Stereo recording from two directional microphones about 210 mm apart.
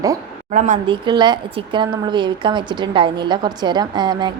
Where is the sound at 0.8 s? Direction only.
20° right (ahead or behind).